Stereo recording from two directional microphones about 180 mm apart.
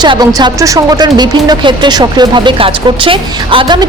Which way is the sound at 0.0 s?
25° right (ahead or behind).